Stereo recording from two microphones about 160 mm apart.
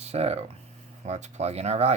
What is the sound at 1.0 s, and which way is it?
Speech, 45° right (ahead or behind).